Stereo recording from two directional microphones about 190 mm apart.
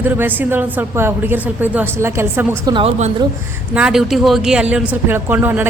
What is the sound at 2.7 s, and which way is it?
Speech, 30° right (ahead or behind).